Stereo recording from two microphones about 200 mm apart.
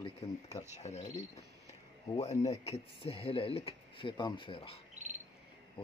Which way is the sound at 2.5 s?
30° left (ahead or behind).